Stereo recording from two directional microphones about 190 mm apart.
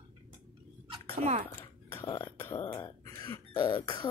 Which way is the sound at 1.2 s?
35° right (ahead or behind).